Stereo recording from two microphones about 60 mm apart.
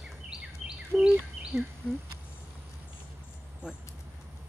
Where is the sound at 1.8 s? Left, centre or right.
Left.